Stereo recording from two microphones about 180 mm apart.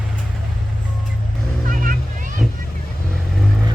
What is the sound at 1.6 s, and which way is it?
Vehicle, 50° right (ahead or behind).